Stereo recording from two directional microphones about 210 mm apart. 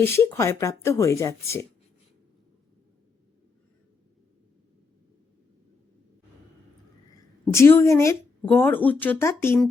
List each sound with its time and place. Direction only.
0.0 s speech: 10° left (ahead or behind)
7.1 s a woman's voice: 15° left (ahead or behind)